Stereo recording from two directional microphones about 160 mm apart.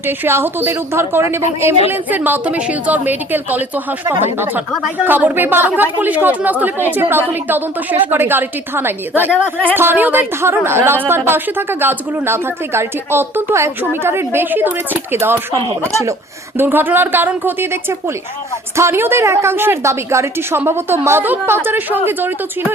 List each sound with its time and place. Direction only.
0.3 s speech: 15° right (ahead or behind)
5.0 s speech: 10° right (ahead or behind)
16.6 s speech: 15° right (ahead or behind)
18.8 s speech: 15° right (ahead or behind)